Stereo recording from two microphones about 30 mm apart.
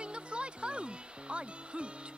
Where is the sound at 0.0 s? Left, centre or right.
Right.